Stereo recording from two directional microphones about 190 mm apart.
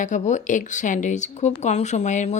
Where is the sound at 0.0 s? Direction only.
40° left (ahead or behind).